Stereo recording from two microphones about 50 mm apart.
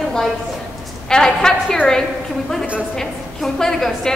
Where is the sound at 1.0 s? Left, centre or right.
Centre.